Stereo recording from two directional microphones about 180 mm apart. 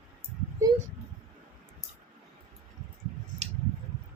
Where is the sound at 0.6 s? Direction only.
15° right (ahead or behind).